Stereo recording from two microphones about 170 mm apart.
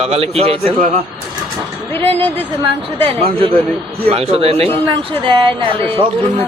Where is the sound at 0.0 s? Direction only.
35° right (ahead or behind).